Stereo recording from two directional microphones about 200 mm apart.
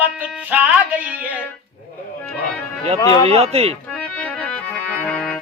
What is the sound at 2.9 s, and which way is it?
Speech, 20° left (ahead or behind).